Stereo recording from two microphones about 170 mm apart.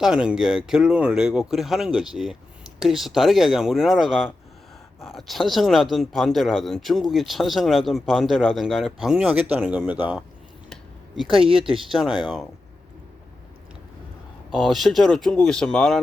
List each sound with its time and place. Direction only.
0.0 s speech: 5° right (ahead or behind)
10.7 s a sound: centre (ahead or behind)
11.4 s speech: 30° right (ahead or behind)
11.9 s speech: 5° right (ahead or behind)
14.5 s speech: centre (ahead or behind)